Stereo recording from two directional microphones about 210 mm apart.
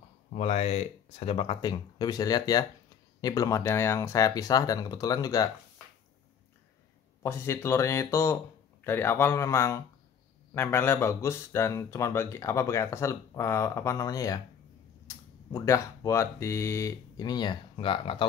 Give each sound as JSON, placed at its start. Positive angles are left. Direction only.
{"t": 0.3, "sound": "speech", "side_deg": 30}
{"t": 7.2, "sound": "speech", "side_deg": 10}